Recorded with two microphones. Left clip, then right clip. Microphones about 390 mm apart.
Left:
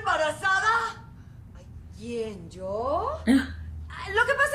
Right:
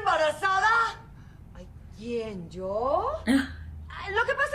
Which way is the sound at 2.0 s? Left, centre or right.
Left.